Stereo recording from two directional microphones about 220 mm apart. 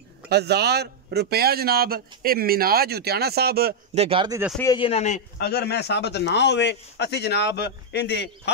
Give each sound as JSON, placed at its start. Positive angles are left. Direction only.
{"t": 0.3, "sound": "a man's voice", "side_deg": -50}
{"t": 3.9, "sound": "speech", "side_deg": -25}
{"t": 4.7, "sound": "speech", "side_deg": 25}
{"t": 5.4, "sound": "a man's voice", "side_deg": 45}